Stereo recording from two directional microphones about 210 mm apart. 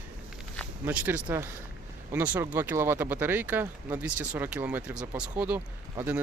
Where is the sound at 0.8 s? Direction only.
10° right (ahead or behind).